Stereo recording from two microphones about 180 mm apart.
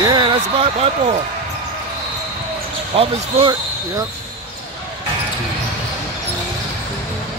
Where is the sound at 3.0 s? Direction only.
35° right (ahead or behind).